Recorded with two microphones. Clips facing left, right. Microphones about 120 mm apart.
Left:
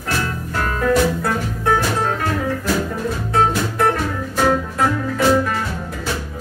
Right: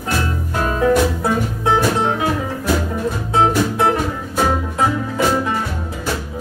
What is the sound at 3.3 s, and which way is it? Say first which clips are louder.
Music: right 2 dB; 20° right (ahead or behind).